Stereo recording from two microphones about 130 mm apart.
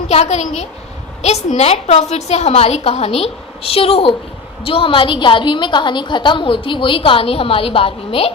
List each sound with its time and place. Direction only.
0.1 s a woman's voice: 55° left (ahead or behind)